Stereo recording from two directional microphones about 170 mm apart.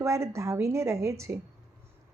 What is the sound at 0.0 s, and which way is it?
Speech, 15° right (ahead or behind).